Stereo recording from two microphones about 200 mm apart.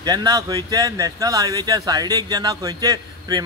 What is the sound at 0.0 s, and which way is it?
A man's voice, 20° right (ahead or behind).